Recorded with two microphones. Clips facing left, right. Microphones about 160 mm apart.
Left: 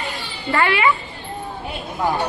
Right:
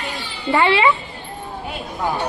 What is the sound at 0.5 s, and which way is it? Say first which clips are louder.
Speech: right 3 dB; 25° right (ahead or behind).